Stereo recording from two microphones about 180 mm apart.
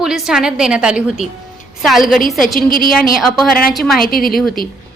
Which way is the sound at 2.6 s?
55° left (ahead or behind).